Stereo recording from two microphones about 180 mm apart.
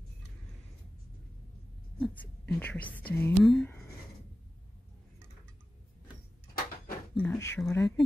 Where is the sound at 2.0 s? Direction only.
5° left (ahead or behind).